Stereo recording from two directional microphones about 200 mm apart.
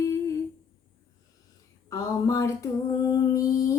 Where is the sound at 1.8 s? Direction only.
15° left (ahead or behind).